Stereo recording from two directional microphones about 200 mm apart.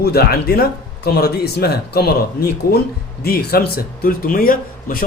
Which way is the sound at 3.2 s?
50° left (ahead or behind).